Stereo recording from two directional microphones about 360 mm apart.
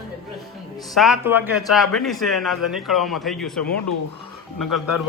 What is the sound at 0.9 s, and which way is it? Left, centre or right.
A man's voice, centre.